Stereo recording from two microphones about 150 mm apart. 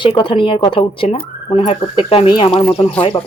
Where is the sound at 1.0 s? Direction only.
45° left (ahead or behind).